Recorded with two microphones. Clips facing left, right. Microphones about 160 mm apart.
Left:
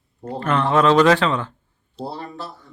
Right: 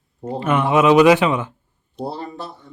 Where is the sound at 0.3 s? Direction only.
5° right (ahead or behind).